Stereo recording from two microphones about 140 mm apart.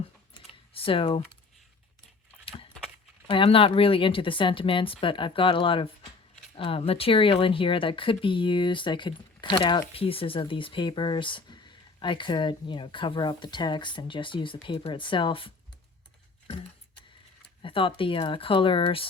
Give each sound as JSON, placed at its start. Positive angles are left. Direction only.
{"t": 0.7, "sound": "speech", "side_deg": 40}
{"t": 3.2, "sound": "speech", "side_deg": 40}
{"t": 17.6, "sound": "speech", "side_deg": 40}